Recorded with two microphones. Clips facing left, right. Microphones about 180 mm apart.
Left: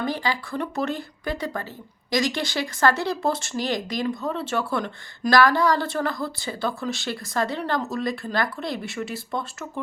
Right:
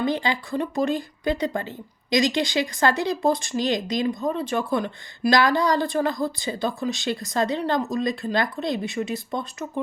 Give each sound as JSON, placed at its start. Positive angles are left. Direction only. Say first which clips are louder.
{"t": 0.0, "sound": "speech", "louder": "right 2 dB", "side_deg": -20}